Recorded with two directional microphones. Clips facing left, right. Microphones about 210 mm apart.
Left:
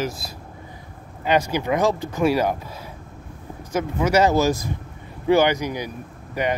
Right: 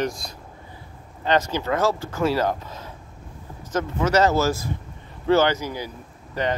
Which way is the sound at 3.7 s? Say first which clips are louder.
Left 1 dB; 10° left (ahead or behind).